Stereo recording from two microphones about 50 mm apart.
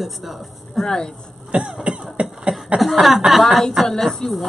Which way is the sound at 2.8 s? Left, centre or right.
Centre.